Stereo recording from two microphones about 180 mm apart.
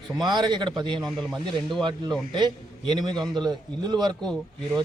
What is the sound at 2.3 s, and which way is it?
Speech, 25° right (ahead or behind).